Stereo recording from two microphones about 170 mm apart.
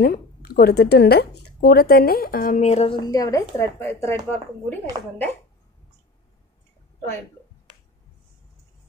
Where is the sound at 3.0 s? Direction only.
20° left (ahead or behind).